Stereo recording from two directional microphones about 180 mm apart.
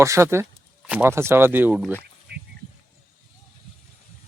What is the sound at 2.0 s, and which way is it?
Duck, 65° right (ahead or behind).